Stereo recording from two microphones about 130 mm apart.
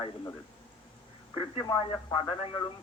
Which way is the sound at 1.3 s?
45° left (ahead or behind).